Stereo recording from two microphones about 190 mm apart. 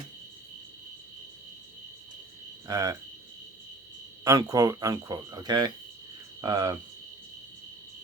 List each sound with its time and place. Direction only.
2.6 s speech: 20° right (ahead or behind)
4.2 s speech: 20° right (ahead or behind)